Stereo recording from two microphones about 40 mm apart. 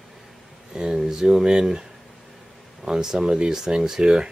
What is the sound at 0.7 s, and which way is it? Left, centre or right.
Speech, centre.